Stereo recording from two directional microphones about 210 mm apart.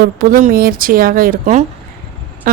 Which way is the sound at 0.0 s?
40° right (ahead or behind).